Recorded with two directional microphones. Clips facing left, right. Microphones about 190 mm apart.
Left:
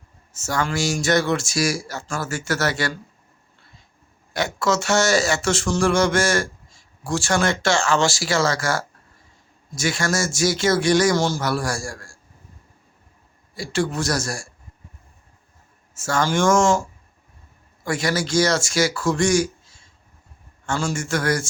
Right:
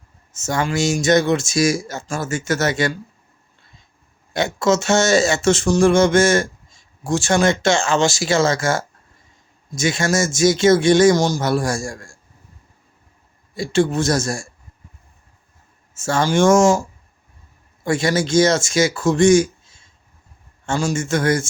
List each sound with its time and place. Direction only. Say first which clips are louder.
0.3 s speech: right 3 dB; 20° right (ahead or behind)
4.4 s speech: right 4 dB; 25° right (ahead or behind)
13.5 s speech: right 6 dB; 25° right (ahead or behind)
16.0 s speech: right 4 dB; 25° right (ahead or behind)
17.8 s speech: right 4 dB; 25° right (ahead or behind)